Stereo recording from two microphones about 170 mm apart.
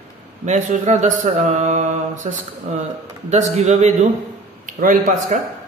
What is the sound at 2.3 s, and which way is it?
Speech, 40° right (ahead or behind).